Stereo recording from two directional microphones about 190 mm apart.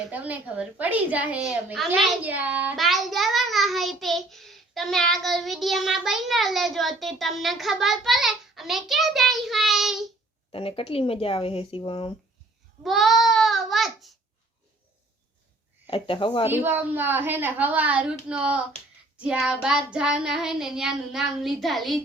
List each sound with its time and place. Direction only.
0.1 s a child's voice: 10° right (ahead or behind)
10.5 s speech: 30° left (ahead or behind)
12.8 s babbling: centre (ahead or behind)
15.9 s speech: 25° left (ahead or behind)
16.5 s a woman's voice: 10° right (ahead or behind)